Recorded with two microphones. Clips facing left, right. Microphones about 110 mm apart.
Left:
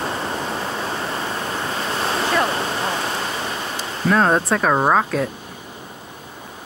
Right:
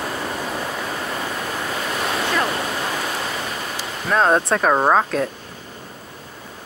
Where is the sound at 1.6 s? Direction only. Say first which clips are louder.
Left 1 dB; 30° left (ahead or behind).